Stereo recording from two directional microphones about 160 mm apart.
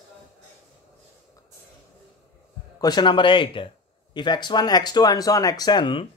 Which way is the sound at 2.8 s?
25° left (ahead or behind).